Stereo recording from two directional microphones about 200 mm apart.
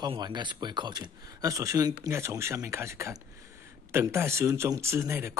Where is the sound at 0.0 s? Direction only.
20° right (ahead or behind).